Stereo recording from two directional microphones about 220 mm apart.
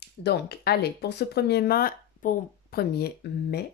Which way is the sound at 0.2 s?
45° left (ahead or behind).